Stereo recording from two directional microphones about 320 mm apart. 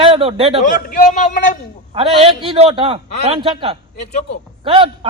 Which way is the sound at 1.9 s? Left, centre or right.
Centre.